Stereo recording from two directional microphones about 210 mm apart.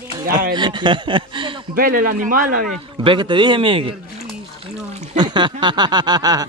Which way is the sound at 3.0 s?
25° right (ahead or behind).